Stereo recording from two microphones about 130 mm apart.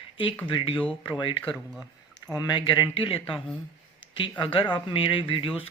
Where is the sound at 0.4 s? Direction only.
40° left (ahead or behind).